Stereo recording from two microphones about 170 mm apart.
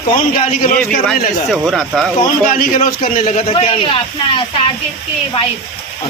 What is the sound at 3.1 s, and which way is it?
A man's voice, 35° left (ahead or behind).